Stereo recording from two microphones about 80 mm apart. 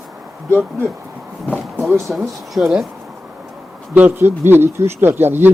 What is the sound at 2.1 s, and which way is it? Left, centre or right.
Speech, centre.